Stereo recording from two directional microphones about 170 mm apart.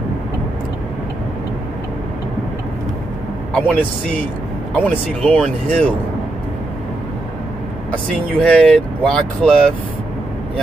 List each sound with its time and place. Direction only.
3.5 s speech: 10° left (ahead or behind)
8.3 s speech: 5° left (ahead or behind)